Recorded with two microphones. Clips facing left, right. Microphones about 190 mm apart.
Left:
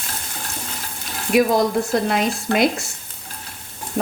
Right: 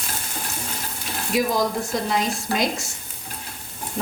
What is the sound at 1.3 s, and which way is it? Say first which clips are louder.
A woman's voice: left 6 dB; 65° left (ahead or behind).